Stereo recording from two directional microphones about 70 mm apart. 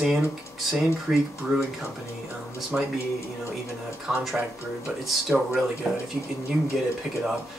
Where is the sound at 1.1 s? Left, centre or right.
Centre.